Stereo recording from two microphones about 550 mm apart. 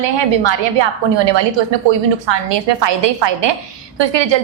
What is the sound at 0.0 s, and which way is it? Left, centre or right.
A woman's voice, right.